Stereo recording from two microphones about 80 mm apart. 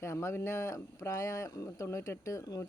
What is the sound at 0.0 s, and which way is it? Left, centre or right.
Speech, left.